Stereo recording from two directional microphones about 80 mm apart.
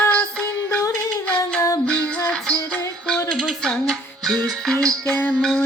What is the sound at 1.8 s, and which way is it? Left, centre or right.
Music, centre.